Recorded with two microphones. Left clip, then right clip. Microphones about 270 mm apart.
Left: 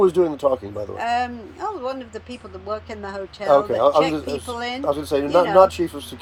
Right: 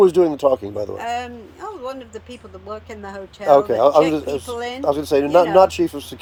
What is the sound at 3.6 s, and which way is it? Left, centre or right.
Speech, right.